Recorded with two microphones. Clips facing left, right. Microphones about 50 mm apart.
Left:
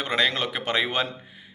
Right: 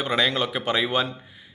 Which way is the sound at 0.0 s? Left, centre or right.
Left.